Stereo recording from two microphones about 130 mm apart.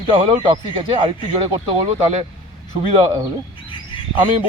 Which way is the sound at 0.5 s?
35° right (ahead or behind).